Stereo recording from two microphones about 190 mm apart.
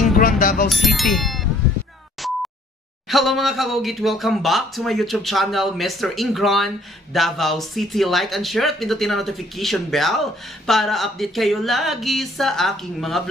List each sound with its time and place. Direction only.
0.2 s music: 50° left (ahead or behind)
0.7 s speech: centre (ahead or behind)
2.2 s a sound: centre (ahead or behind)
3.1 s speech: centre (ahead or behind)